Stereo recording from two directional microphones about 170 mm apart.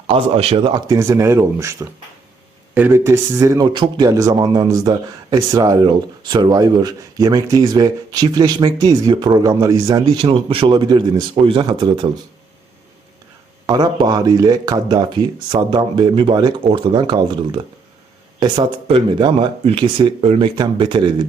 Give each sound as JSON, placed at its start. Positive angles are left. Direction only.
{"t": 0.1, "sound": "a man's voice", "side_deg": -35}
{"t": 13.7, "sound": "a man's voice", "side_deg": -25}